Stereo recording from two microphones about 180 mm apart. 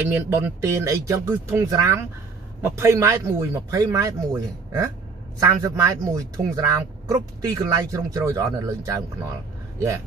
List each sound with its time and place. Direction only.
0.1 s a man's voice: 15° right (ahead or behind)